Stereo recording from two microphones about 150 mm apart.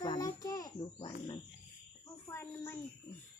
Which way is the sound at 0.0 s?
30° left (ahead or behind).